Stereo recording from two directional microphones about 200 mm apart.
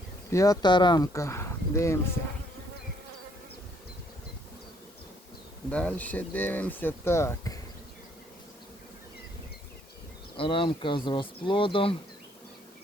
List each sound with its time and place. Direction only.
0.3 s speech: 15° left (ahead or behind)
5.7 s speech: 5° left (ahead or behind)
10.3 s speech: 25° left (ahead or behind)